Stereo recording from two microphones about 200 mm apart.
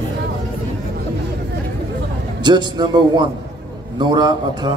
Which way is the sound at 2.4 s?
20° right (ahead or behind).